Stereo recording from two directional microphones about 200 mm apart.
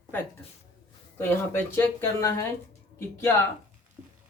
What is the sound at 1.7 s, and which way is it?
Speech, 15° left (ahead or behind).